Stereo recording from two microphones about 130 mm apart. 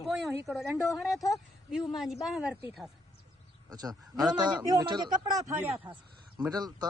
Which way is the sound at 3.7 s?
30° right (ahead or behind).